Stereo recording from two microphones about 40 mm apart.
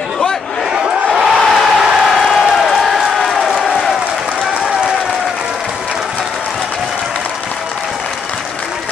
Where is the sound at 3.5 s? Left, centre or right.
Centre.